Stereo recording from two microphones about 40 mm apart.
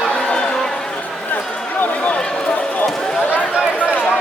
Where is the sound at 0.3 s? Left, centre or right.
Left.